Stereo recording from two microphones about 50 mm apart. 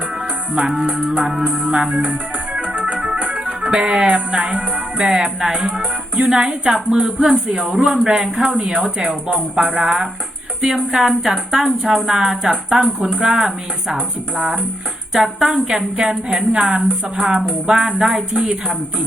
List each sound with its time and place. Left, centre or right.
0.9 s music: right
1.2 s speech: centre
2.0 s music: right
2.9 s organ: right
3.4 s speech: centre
5.6 s music: right
6.2 s speech: centre
15.5 s speech: centre